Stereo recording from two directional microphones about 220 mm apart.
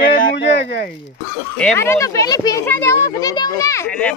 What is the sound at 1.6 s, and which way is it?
Speech, 10° left (ahead or behind).